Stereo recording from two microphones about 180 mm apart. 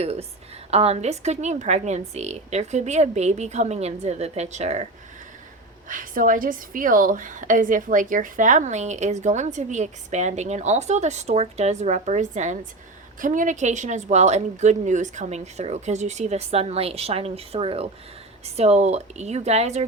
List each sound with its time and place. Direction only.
0.0 s a woman's voice: 35° right (ahead or behind)
5.9 s a woman's voice: 50° right (ahead or behind)